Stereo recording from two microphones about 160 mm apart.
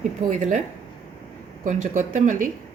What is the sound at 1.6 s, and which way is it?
Speech, 55° right (ahead or behind).